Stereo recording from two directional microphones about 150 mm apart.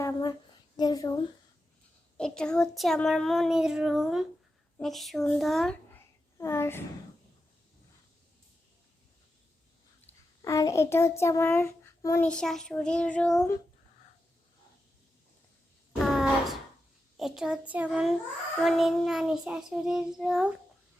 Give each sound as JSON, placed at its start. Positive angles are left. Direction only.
{"t": 0.0, "sound": "a sound", "side_deg": 25}
{"t": 0.8, "sound": "speech", "side_deg": 25}
{"t": 2.1, "sound": "child singing", "side_deg": 5}
{"t": 6.3, "sound": "a woman's voice", "side_deg": 20}
{"t": 10.1, "sound": "a child's voice", "side_deg": 20}
{"t": 12.3, "sound": "child singing", "side_deg": 5}
{"t": 15.9, "sound": "a sound", "side_deg": 0}
{"t": 17.2, "sound": "child singing", "side_deg": -5}